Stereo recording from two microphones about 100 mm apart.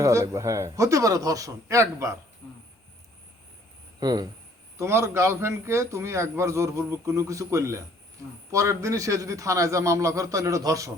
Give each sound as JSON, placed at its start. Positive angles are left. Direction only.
{"t": 0.0, "sound": "a man's voice", "side_deg": -30}
{"t": 4.0, "sound": "a man's voice", "side_deg": -40}
{"t": 4.8, "sound": "a man's voice", "side_deg": -25}